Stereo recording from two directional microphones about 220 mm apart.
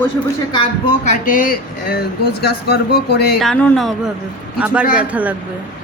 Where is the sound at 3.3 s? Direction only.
Centre (ahead or behind).